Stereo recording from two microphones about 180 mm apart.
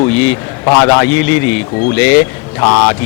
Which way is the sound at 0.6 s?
20° left (ahead or behind).